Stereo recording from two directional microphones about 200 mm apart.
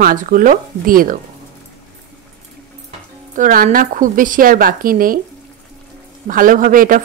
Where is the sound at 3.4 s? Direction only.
40° right (ahead or behind).